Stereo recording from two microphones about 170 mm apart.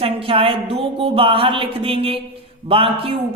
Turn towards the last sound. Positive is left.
turn(degrees=-30)  # may be behind; listen again after turning